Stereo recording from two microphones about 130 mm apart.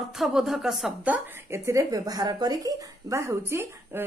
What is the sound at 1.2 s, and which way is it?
Speech, 20° right (ahead or behind).